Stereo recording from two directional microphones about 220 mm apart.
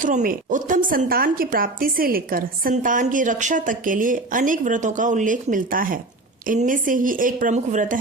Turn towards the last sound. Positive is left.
turn(degrees=-35)  # may be behind; listen again after turning